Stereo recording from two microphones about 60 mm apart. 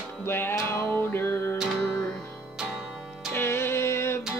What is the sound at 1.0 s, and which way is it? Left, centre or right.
Music, left.